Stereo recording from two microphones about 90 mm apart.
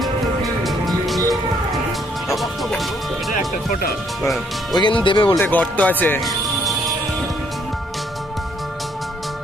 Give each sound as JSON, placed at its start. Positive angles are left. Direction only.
{"t": 0.7, "sound": "music", "side_deg": 0}
{"t": 4.7, "sound": "speech", "side_deg": 60}
{"t": 5.4, "sound": "speech", "side_deg": 15}
{"t": 6.2, "sound": "music", "side_deg": 0}